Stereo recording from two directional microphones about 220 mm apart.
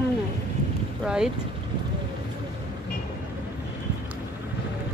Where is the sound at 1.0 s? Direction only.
5° right (ahead or behind).